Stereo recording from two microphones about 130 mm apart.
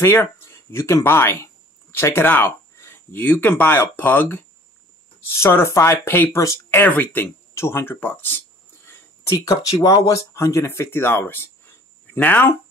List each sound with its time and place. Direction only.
0.0 s speech: 20° left (ahead or behind)